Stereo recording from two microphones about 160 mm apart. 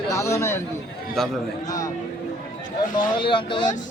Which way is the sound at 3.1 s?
30° left (ahead or behind).